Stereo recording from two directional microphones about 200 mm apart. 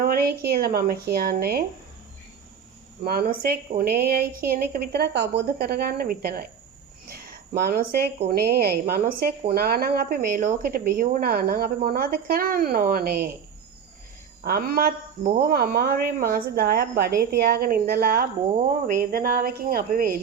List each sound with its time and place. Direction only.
0.0 s a woman's voice: 50° right (ahead or behind)
3.0 s a woman's voice: 50° right (ahead or behind)
7.1 s a sound: 50° right (ahead or behind)
8.3 s a woman's voice: 50° right (ahead or behind)
14.4 s a woman's voice: 50° right (ahead or behind)